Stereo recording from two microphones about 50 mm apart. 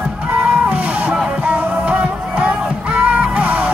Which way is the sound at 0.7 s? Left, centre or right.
Right.